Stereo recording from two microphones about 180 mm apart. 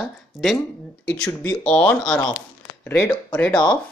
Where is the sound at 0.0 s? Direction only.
Centre (ahead or behind).